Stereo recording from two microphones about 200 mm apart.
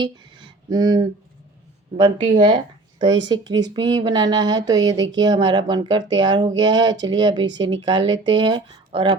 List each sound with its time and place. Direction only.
0.0 s speech: 20° right (ahead or behind)